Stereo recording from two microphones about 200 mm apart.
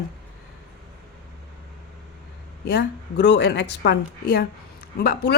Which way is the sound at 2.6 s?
55° left (ahead or behind).